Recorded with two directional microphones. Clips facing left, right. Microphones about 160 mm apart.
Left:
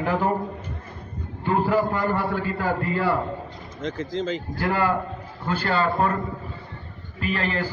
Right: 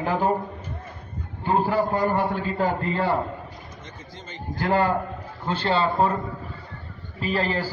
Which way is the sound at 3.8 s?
90° left.